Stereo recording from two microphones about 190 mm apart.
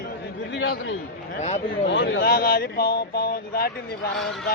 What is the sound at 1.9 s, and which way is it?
Speech, 65° left (ahead or behind).